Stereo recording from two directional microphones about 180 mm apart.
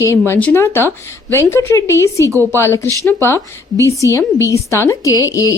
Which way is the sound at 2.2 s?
15° right (ahead or behind).